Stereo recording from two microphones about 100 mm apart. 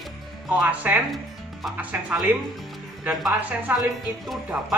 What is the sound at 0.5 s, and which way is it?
Speech, 15° right (ahead or behind).